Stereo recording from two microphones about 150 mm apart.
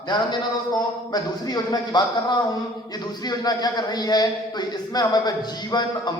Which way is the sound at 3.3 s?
25° left (ahead or behind).